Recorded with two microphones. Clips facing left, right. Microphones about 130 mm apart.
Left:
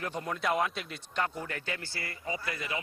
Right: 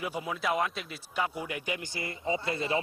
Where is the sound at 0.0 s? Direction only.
5° right (ahead or behind).